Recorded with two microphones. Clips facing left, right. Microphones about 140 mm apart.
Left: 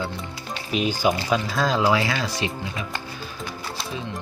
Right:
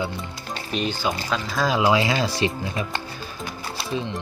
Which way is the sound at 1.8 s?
20° right (ahead or behind).